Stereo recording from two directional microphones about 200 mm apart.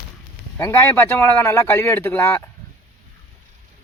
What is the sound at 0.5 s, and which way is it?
A man's voice, 10° left (ahead or behind).